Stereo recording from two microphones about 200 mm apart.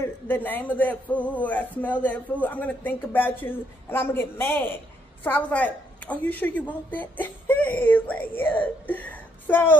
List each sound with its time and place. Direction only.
0.0 s a man's voice: 10° left (ahead or behind)